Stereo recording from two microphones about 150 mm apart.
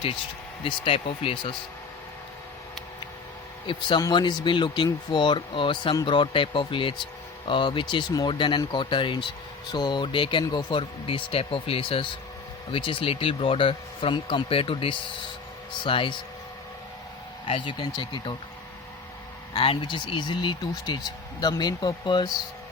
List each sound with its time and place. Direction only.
0.6 s speech: 35° left (ahead or behind)
3.7 s speech: 30° left (ahead or behind)
17.4 s speech: 35° left (ahead or behind)
19.5 s speech: 35° left (ahead or behind)